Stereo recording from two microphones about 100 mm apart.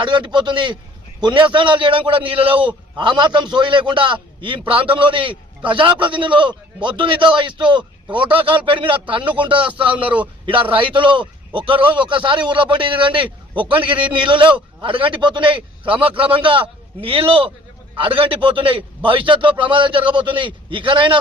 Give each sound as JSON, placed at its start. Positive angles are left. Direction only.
{"t": 0.0, "sound": "a man's voice", "side_deg": -55}
{"t": 9.9, "sound": "a man's voice", "side_deg": -15}
{"t": 10.4, "sound": "a man's voice", "side_deg": -60}